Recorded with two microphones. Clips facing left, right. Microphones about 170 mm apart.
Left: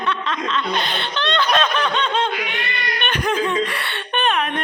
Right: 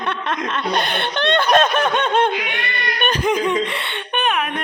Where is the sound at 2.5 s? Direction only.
55° right (ahead or behind).